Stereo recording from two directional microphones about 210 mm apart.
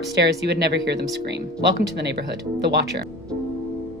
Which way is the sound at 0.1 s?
50° right (ahead or behind).